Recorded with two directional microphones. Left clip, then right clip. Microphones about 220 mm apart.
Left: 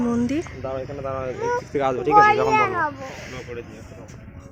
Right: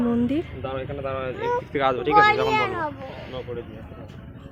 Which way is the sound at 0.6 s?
30° left (ahead or behind).